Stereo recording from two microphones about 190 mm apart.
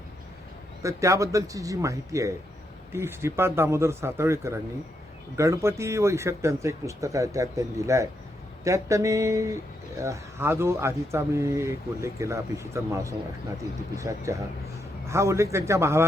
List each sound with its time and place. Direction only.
0.8 s speech: 15° right (ahead or behind)